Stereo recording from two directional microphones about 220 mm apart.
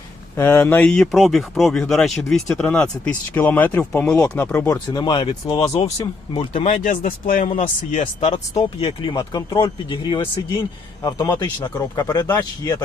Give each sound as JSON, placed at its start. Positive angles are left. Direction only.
{"t": 0.3, "sound": "speech", "side_deg": 10}
{"t": 6.6, "sound": "speech", "side_deg": 35}